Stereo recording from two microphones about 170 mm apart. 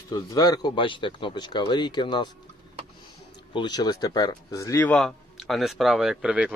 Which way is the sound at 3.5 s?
25° left (ahead or behind).